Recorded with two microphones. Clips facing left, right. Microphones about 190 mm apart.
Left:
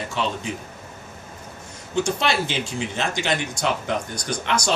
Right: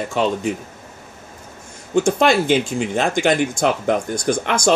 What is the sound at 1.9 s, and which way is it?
Speech, 50° right (ahead or behind).